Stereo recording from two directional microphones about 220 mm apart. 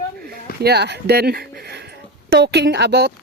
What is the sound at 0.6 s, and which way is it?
Speech, 50° right (ahead or behind).